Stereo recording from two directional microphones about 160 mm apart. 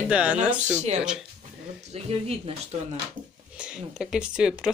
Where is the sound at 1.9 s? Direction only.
40° right (ahead or behind).